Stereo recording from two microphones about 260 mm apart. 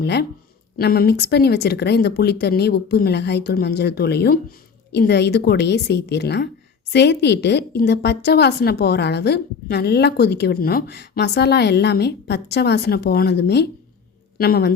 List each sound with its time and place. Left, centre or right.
0.0 s a woman's voice: left